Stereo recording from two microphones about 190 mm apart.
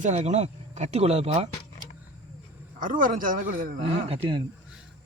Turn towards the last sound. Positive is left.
turn(degrees=-25)  # may be behind; listen again after turning